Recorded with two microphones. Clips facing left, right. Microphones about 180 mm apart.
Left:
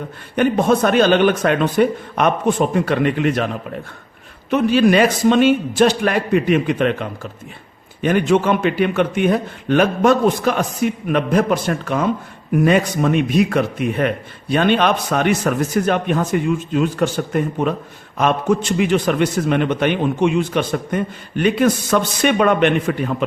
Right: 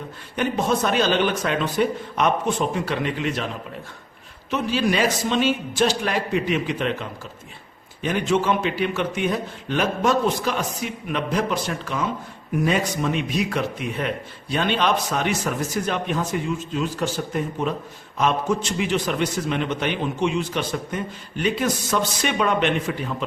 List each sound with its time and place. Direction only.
0.3 s a man's voice: 55° left (ahead or behind)
4.5 s a man's voice: 60° left (ahead or behind)